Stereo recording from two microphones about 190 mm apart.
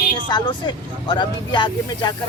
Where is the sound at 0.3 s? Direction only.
25° left (ahead or behind).